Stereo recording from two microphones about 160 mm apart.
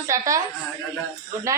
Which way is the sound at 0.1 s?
20° right (ahead or behind).